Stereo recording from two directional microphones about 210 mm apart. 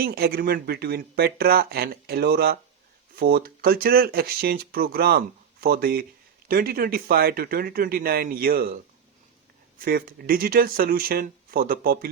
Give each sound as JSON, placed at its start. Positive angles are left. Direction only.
{"t": 0.0, "sound": "speech", "side_deg": -45}